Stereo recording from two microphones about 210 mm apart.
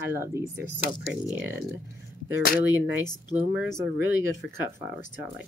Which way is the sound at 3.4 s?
5° right (ahead or behind).